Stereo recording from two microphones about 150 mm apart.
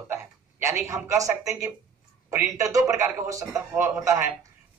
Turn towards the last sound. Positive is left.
turn(degrees=-15)  # may be behind; listen again after turning